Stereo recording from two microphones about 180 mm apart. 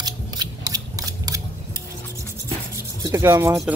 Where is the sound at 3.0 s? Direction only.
15° right (ahead or behind).